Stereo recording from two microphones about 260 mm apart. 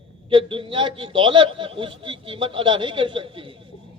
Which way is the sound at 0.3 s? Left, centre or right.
Centre.